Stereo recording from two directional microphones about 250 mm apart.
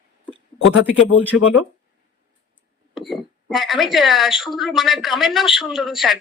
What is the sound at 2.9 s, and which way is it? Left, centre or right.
Speech, centre.